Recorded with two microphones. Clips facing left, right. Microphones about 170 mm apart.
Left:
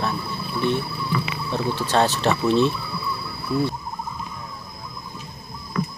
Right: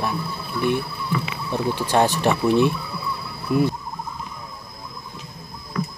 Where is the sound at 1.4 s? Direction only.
15° right (ahead or behind).